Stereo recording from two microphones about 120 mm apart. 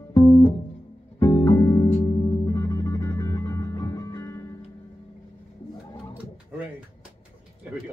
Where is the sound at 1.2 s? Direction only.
25° left (ahead or behind).